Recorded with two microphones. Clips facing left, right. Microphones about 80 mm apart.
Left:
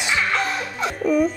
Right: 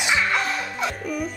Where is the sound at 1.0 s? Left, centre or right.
Left.